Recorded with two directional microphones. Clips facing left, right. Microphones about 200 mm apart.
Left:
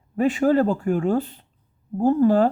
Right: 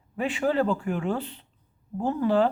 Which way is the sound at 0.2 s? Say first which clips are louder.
Left 6 dB; 45° left (ahead or behind).